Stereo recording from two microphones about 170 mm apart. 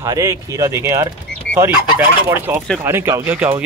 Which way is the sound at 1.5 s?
90° left.